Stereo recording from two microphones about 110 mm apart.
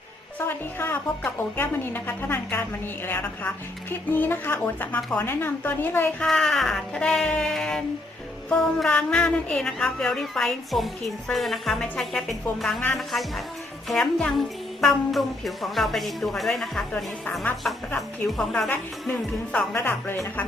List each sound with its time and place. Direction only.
0.3 s speech: 20° left (ahead or behind)
6.2 s a sound: 5° left (ahead or behind)
19.5 s speech: 15° left (ahead or behind)